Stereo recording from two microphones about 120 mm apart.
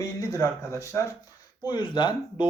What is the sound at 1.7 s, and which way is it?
Speech, 40° left (ahead or behind).